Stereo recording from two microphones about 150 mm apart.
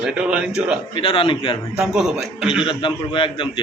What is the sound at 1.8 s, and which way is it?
Speech, 5° right (ahead or behind).